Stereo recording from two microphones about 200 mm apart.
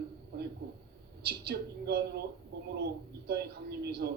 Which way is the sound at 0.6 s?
55° right (ahead or behind).